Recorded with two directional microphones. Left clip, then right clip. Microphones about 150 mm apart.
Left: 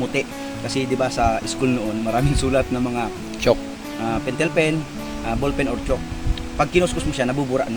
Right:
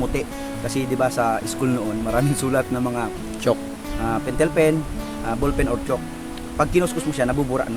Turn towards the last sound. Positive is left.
turn(degrees=-10)  # may be behind; listen again after turning